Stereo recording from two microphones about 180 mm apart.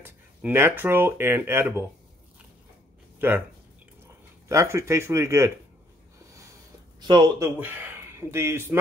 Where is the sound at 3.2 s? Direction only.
10° right (ahead or behind).